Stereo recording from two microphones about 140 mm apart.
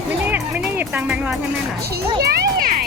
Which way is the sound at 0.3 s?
10° right (ahead or behind).